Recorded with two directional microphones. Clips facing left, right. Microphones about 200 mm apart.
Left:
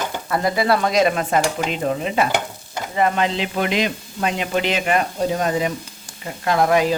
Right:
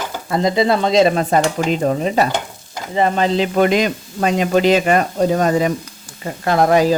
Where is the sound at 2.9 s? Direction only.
30° right (ahead or behind).